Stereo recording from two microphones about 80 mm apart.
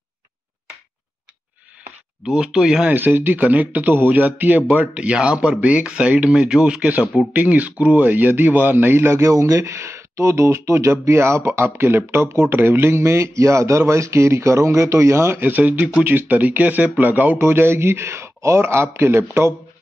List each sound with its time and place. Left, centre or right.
2.2 s speech: centre
2.9 s speech: right